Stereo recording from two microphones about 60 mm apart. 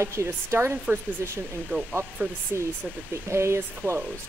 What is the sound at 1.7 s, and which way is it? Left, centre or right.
Speech, right.